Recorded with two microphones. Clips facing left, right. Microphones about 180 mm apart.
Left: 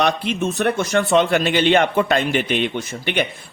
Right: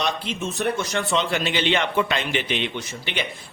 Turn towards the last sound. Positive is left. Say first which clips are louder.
# left 7 dB
turn(degrees=55)  # may be behind; listen again after turning